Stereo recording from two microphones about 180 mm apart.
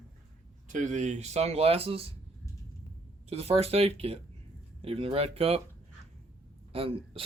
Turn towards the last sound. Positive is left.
turn(degrees=-35)  # may be behind; listen again after turning